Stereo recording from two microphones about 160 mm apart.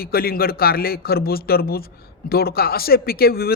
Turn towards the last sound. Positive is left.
turn(degrees=70)  # may be behind; listen again after turning